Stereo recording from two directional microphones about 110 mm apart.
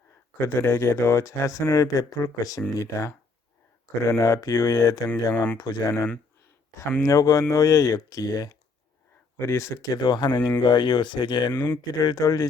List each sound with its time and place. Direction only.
0.4 s speech: 20° left (ahead or behind)
5.0 s speech: 10° left (ahead or behind)
5.5 s speech: 35° left (ahead or behind)
7.0 s speech: 30° left (ahead or behind)
11.5 s speech: 15° left (ahead or behind)
11.9 s speech: 35° left (ahead or behind)